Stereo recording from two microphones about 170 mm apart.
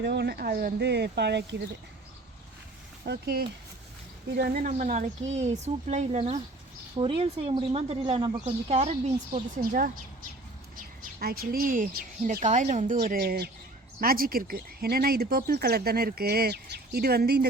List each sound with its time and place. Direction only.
0.0 s speech: 80° right
3.0 s speech: 65° right (ahead or behind)
4.7 s a woman's voice: 45° right (ahead or behind)
9.6 s speech: 55° right (ahead or behind)